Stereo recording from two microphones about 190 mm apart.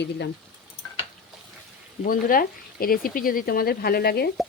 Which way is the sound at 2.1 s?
50° left (ahead or behind).